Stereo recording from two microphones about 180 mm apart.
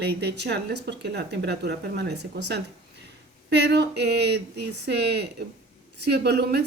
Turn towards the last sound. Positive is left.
turn(degrees=-65)  # may be behind; listen again after turning